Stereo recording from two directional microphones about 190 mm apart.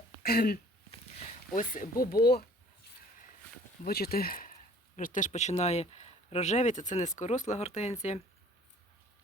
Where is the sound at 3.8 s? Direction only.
55° left (ahead or behind); by 8.2 s 35° left (ahead or behind).